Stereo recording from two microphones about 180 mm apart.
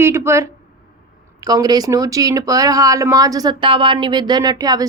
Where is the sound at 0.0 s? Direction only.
15° right (ahead or behind).